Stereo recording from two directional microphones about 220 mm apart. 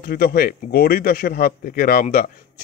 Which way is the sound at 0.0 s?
40° left (ahead or behind).